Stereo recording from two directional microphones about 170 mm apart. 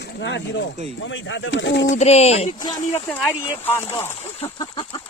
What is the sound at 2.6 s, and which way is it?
Speech, 25° left (ahead or behind).